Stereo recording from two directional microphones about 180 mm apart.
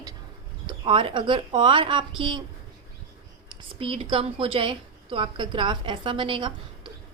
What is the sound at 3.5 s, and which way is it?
A woman's voice, 30° right (ahead or behind).